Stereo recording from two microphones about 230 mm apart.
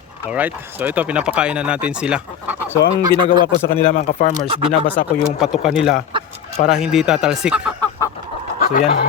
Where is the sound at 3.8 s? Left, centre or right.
Left.